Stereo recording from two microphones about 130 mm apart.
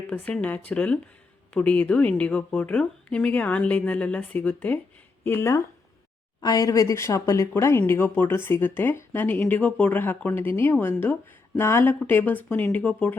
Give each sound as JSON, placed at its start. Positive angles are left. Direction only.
{"t": 0.1, "sound": "speech", "side_deg": 10}